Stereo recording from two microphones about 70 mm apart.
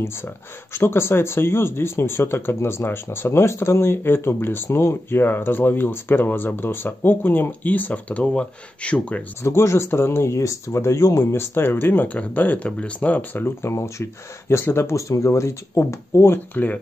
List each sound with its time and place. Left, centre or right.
0.7 s speech: left; by 9.2 s centre
9.4 s speech: left
11.5 s speech: left
13.6 s speech: left